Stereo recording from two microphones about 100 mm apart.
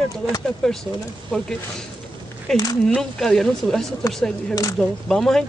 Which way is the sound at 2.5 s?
Centre (ahead or behind).